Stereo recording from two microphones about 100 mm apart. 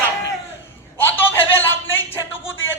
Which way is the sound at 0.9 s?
20° left (ahead or behind).